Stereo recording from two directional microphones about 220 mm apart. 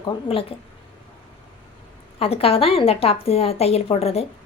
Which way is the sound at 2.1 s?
25° left (ahead or behind).